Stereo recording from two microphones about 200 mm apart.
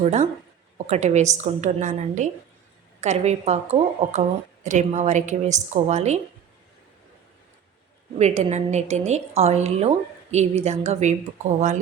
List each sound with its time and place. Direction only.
0.0 s speech: 35° right (ahead or behind)
8.2 s speech: 35° right (ahead or behind)